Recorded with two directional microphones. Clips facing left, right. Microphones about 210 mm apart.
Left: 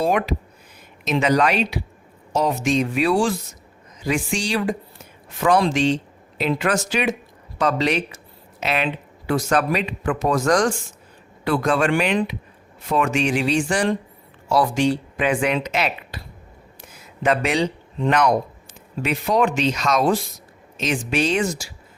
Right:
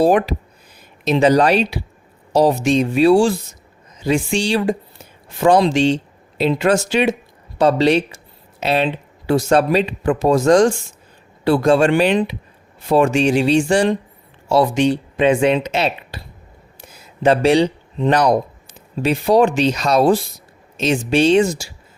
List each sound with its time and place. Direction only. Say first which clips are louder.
0.0 s speech: right 6 dB; 35° right (ahead or behind)
5.6 s a sound: right 4 dB; 30° right (ahead or behind)
6.5 s speech: right 5 dB; 25° right (ahead or behind)
17.2 s speech: right 7 dB; 30° right (ahead or behind)